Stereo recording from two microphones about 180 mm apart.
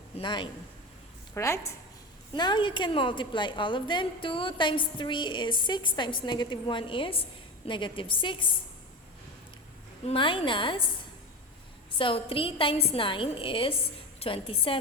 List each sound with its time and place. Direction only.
0.2 s a woman's voice: 25° left (ahead or behind)
10.1 s a woman's voice: 30° left (ahead or behind)
11.9 s a woman's voice: 30° left (ahead or behind)